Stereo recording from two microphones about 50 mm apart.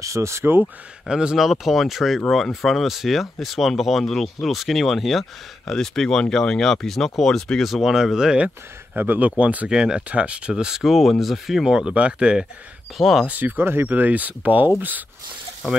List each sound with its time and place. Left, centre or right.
0.0 s speech: right
1.0 s speech: centre
1.4 s speech: centre
8.9 s speech: right
9.4 s speech: right
9.7 s speech: centre
10.5 s speech: centre
11.9 s speech: right
13.3 s speech: right
13.8 s speech: right